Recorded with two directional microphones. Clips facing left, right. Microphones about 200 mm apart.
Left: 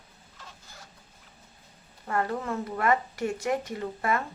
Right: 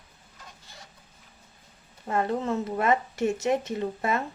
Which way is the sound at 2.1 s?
20° right (ahead or behind).